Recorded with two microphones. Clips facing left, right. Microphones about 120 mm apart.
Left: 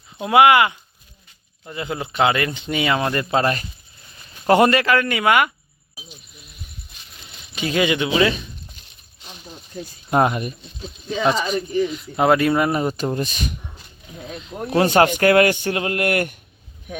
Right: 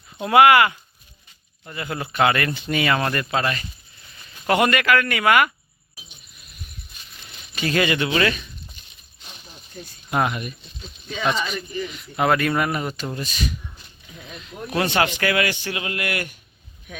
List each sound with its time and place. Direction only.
0.2 s speech: 15° left (ahead or behind)
3.2 s speech: 30° left (ahead or behind)
7.5 s speech: 10° left (ahead or behind)
10.1 s speech: 30° left (ahead or behind)
11.7 s speech: 20° left (ahead or behind)
13.0 s speech: 45° left (ahead or behind)
14.2 s speech: 35° left (ahead or behind); by 16.4 s 50° left (ahead or behind)